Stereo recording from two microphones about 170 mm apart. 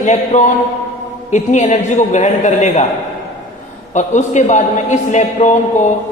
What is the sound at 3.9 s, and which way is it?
A man's voice, 45° left (ahead or behind).